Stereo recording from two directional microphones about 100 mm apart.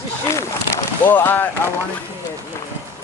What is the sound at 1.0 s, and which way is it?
Speech, 20° left (ahead or behind).